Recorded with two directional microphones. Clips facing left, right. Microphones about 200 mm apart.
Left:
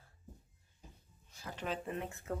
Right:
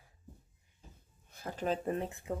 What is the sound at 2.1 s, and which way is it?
Speech, 15° right (ahead or behind).